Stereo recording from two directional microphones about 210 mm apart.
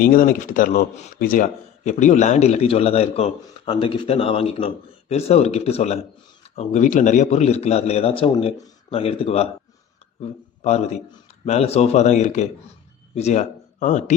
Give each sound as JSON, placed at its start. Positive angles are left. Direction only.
{"t": 0.0, "sound": "speech", "side_deg": 45}